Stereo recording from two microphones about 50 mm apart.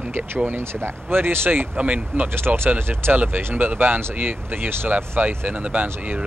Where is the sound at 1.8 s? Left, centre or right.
Right.